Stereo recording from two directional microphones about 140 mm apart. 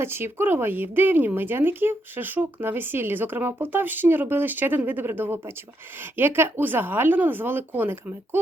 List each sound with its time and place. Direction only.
0.0 s speech: 15° right (ahead or behind)